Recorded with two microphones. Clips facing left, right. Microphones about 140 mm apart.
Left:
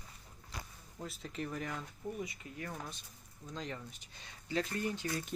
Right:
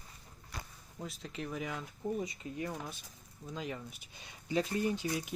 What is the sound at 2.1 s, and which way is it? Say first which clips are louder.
Speech: right 5 dB; 25° right (ahead or behind).